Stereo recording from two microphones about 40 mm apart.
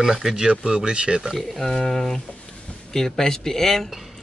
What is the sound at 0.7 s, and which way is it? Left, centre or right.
Speech, right.